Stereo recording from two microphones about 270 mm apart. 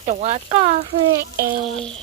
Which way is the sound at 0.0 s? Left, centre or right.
Right.